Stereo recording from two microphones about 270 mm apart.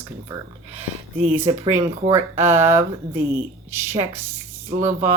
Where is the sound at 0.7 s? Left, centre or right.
Right.